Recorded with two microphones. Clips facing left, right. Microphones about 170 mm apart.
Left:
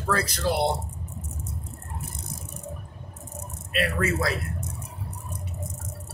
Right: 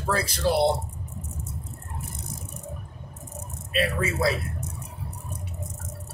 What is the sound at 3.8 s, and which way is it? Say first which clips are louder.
Speech: right 1 dB; 25° right (ahead or behind).